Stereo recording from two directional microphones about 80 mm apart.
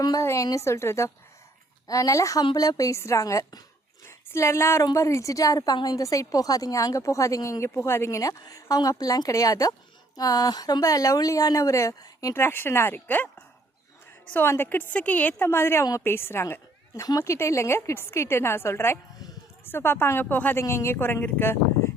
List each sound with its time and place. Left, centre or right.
0.2 s a woman's voice: left
1.9 s a woman's voice: left
7.7 s a woman's voice: left
12.3 s speech: left
14.4 s a woman's voice: left
15.8 s speech: left
16.0 s a woman's voice: left
16.9 s speech: left
17.2 s a woman's voice: left
20.6 s speech: left